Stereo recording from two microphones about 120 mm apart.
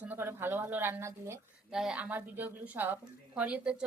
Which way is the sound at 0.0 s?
15° right (ahead or behind).